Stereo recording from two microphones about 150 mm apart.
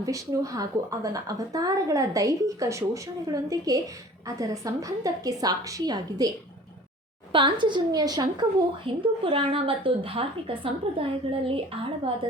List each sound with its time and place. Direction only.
0.0 s a woman's voice: 25° right (ahead or behind)
7.3 s a woman's voice: 30° right (ahead or behind)